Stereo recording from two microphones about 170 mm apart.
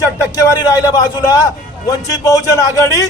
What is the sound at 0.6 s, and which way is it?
A man's voice, 25° left (ahead or behind).